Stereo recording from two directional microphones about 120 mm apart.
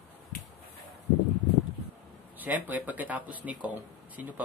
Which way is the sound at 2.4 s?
15° right (ahead or behind).